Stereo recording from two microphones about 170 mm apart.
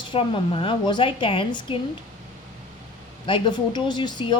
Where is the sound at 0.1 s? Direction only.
30° left (ahead or behind).